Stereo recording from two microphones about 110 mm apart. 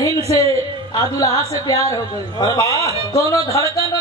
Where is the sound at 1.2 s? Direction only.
35° left (ahead or behind).